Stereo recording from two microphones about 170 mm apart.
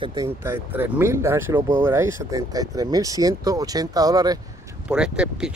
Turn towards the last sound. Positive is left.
turn(degrees=-5)  # may be behind; listen again after turning